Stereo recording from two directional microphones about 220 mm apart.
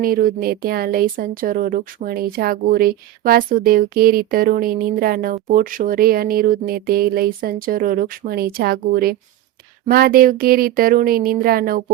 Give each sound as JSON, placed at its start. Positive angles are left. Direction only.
{"t": 0.0, "sound": "speech", "side_deg": -40}